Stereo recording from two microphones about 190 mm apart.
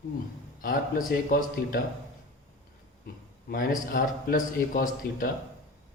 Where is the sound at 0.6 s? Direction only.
45° left (ahead or behind).